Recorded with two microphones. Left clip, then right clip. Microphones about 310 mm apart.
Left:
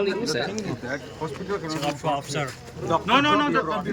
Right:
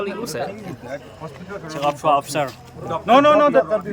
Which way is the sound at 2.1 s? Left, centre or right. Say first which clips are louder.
Right 8 dB; centre.